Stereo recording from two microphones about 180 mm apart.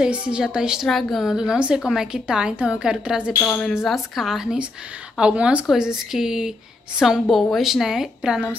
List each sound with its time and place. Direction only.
0.0 s a woman's voice: 5° right (ahead or behind)
3.3 s a woman's voice: 5° left (ahead or behind)